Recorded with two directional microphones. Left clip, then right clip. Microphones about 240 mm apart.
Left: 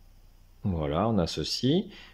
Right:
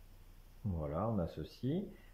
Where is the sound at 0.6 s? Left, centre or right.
Left.